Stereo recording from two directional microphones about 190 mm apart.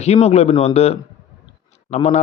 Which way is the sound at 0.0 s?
35° left (ahead or behind).